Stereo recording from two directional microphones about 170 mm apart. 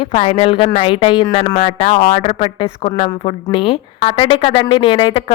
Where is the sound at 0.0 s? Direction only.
35° left (ahead or behind).